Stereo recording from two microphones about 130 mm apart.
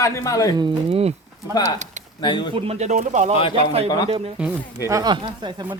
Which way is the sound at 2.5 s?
55° right (ahead or behind).